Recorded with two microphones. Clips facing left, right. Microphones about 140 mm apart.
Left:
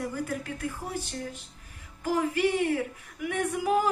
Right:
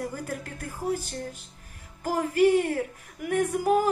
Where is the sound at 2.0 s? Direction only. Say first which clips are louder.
Right 4 dB; 45° right (ahead or behind).